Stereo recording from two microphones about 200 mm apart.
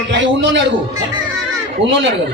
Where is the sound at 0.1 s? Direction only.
60° right (ahead or behind).